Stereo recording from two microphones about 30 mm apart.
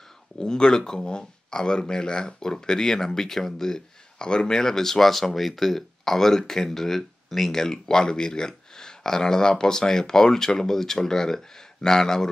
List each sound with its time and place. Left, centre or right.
0.4 s speech: left
5.1 s speech: centre